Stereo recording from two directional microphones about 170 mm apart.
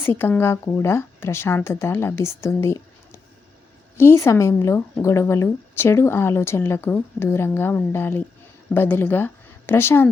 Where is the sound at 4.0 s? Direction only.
15° left (ahead or behind).